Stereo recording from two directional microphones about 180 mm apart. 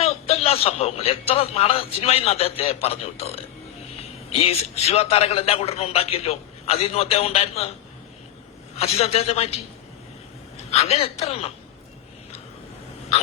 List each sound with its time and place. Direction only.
0.0 s a man's voice: 35° left (ahead or behind)
8.7 s a man's voice: 35° left (ahead or behind)
10.6 s a man's voice: 35° left (ahead or behind)